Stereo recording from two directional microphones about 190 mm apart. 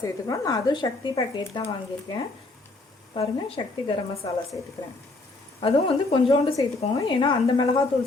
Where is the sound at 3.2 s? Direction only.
30° left (ahead or behind).